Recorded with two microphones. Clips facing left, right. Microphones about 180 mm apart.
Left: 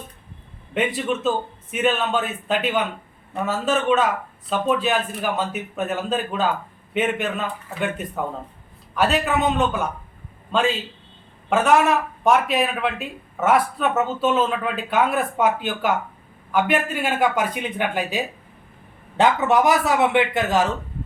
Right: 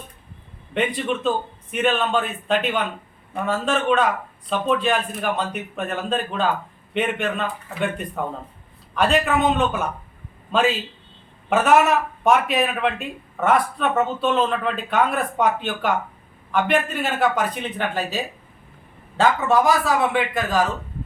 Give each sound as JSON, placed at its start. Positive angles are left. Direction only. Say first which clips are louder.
{"t": 0.7, "sound": "a man's voice", "louder": "even", "side_deg": 5}
{"t": 11.4, "sound": "a man's voice", "louder": "right 1 dB", "side_deg": 0}